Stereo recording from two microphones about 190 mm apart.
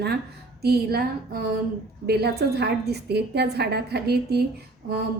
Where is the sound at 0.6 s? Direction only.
55° right (ahead or behind).